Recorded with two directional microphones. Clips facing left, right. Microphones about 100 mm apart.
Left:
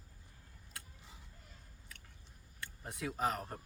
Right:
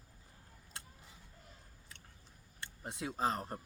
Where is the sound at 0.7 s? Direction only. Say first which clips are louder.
Right 1 dB; 25° right (ahead or behind).